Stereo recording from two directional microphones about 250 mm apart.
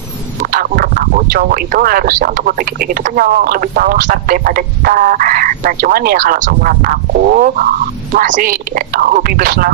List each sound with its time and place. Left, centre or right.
0.4 s speech: right